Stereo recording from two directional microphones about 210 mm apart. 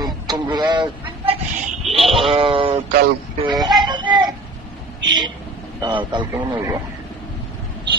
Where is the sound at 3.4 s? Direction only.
20° right (ahead or behind).